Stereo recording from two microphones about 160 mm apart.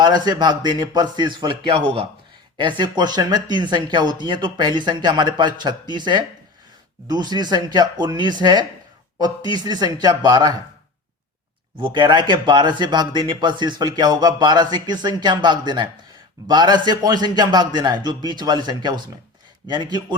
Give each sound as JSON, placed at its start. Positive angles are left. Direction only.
{"t": 0.0, "sound": "speech", "side_deg": -25}
{"t": 2.6, "sound": "speech", "side_deg": -30}
{"t": 7.1, "sound": "speech", "side_deg": -25}
{"t": 11.8, "sound": "speech", "side_deg": -30}